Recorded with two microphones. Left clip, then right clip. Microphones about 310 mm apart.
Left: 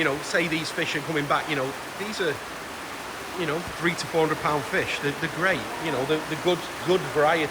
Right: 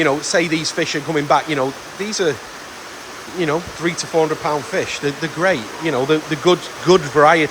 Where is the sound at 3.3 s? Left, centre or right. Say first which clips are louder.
Right 9 dB; centre.